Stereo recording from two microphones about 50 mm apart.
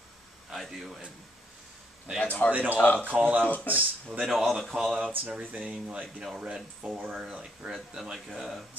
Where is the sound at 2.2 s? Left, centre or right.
Left.